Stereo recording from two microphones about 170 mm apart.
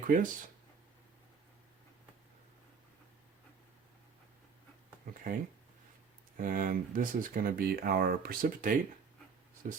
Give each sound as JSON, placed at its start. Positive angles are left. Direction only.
{"t": 0.1, "sound": "speech", "side_deg": -55}
{"t": 5.1, "sound": "speech", "side_deg": -60}
{"t": 6.3, "sound": "speech", "side_deg": -55}